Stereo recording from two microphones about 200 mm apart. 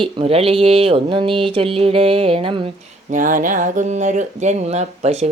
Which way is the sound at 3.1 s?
40° right (ahead or behind).